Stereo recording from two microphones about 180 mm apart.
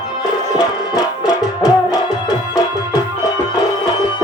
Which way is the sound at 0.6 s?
25° left (ahead or behind).